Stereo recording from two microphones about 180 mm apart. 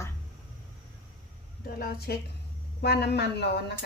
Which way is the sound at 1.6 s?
55° left (ahead or behind).